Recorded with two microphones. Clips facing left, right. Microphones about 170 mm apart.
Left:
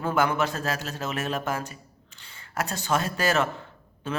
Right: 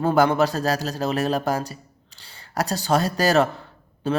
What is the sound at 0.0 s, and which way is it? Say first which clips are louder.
Speech: right 6 dB; 35° right (ahead or behind).